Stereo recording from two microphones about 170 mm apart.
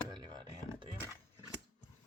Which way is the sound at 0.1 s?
25° right (ahead or behind).